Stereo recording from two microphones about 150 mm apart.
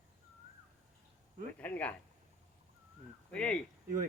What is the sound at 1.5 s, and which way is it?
Speech, 10° left (ahead or behind).